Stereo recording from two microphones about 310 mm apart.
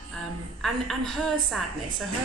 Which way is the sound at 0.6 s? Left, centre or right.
Centre.